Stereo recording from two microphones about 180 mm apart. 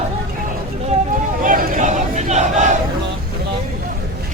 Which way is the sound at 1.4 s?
50° right (ahead or behind).